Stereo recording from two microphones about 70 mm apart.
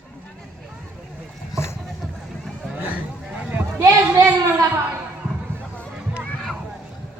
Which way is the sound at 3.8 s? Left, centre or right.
Right.